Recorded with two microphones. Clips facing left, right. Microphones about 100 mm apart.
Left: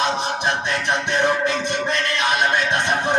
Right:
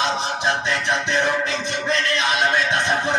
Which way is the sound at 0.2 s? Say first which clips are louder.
Even; 60° left (ahead or behind).